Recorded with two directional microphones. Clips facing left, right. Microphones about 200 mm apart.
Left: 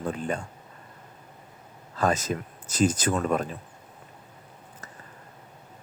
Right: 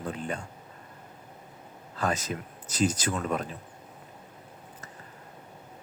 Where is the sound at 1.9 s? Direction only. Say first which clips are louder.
Left 5 dB; 45° left (ahead or behind).